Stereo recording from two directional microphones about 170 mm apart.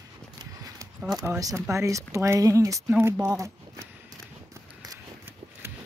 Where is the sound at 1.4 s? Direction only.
20° right (ahead or behind).